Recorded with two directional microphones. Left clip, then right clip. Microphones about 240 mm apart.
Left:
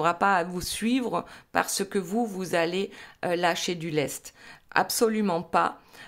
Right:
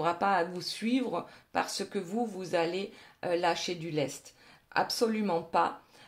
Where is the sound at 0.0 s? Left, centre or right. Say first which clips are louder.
Left 5 dB; left.